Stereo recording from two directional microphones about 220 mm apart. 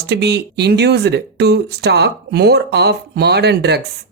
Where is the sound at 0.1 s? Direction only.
50° right (ahead or behind).